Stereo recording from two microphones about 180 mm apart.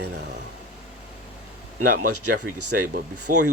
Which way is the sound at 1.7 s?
45° right (ahead or behind).